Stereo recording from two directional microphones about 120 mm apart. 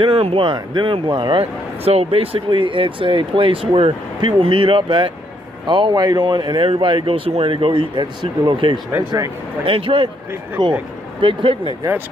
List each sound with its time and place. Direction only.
0.0 s speech: 55° right (ahead or behind)
10.6 s speech: 35° right (ahead or behind)
11.1 s speech: 45° right (ahead or behind)